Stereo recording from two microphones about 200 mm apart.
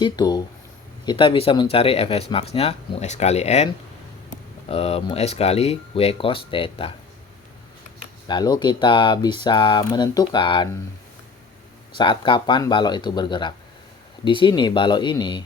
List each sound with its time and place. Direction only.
0.0 s speech: 20° left (ahead or behind)
4.7 s speech: 30° left (ahead or behind)
8.3 s speech: 20° left (ahead or behind)
11.9 s speech: 25° left (ahead or behind)